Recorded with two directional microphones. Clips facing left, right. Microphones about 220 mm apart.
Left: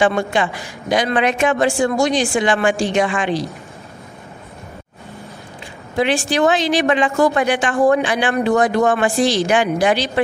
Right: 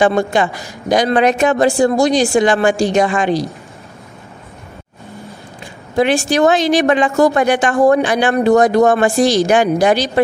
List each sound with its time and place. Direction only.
0.0 s speech: 40° right (ahead or behind)
5.9 s a woman's voice: 45° right (ahead or behind)